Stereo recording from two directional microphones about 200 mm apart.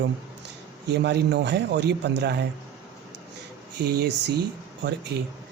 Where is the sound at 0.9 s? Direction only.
60° right (ahead or behind).